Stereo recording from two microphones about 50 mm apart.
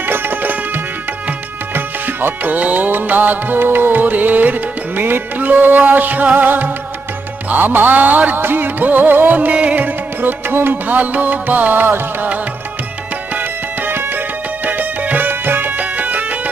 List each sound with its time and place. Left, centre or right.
0.1 s music: right
1.7 s music: right
14.6 s music: right
15.8 s music: right